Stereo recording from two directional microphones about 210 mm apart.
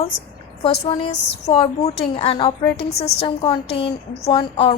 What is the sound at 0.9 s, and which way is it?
A woman's voice, 25° left (ahead or behind).